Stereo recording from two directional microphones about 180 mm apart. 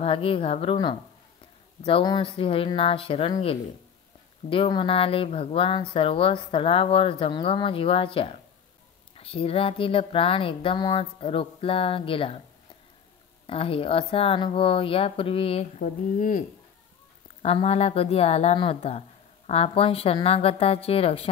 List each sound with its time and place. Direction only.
0.0 s speech: 30° left (ahead or behind)
13.5 s speech: 30° left (ahead or behind)
17.4 s speech: 35° left (ahead or behind)